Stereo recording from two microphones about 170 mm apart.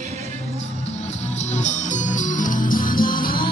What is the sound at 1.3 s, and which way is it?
Music, 45° left (ahead or behind).